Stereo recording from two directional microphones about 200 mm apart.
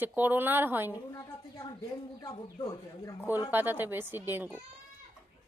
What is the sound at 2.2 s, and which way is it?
Speech, 25° left (ahead or behind).